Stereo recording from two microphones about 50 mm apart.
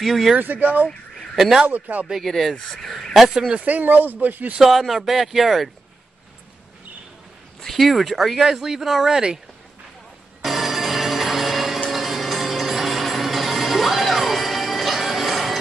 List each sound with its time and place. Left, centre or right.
0.0 s speech: centre
0.4 s speech: right
1.3 s speech: centre
1.7 s speech: right
2.0 s speech: centre
2.7 s a sound: centre
3.4 s speech: right
4.6 s speech: centre
7.6 s speech: centre
10.4 s music: centre